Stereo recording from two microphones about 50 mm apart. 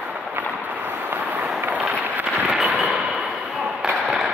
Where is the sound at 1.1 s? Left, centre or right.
Right.